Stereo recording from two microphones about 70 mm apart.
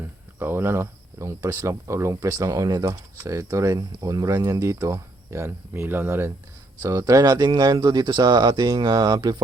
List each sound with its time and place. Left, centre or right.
0.0 s speech: right
6.8 s speech: right